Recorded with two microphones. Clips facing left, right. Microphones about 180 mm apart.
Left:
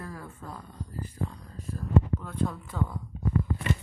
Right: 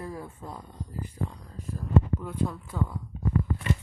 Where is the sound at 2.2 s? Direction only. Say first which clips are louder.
Right 1 dB; 10° right (ahead or behind).